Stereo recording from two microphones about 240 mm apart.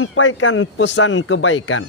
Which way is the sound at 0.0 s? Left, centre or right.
Left.